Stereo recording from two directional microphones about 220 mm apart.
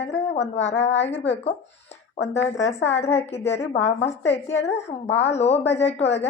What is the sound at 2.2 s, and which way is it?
A woman's voice, 30° left (ahead or behind).